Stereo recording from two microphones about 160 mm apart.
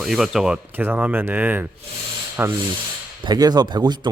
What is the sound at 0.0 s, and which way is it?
Speech, centre (ahead or behind).